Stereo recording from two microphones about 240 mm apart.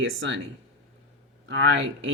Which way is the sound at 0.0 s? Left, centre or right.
Right.